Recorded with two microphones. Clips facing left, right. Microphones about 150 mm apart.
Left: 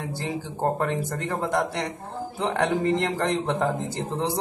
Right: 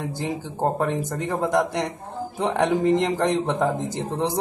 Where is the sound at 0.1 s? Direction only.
15° right (ahead or behind).